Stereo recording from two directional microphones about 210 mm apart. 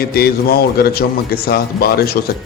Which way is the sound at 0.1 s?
45° left (ahead or behind).